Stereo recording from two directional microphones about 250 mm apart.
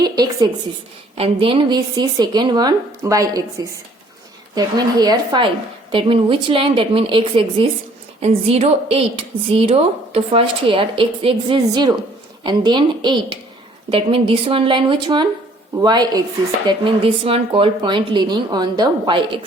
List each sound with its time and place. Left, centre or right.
0.0 s a woman's voice: centre